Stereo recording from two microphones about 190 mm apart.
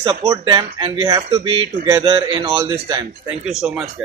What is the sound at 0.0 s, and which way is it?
Speech, 20° right (ahead or behind).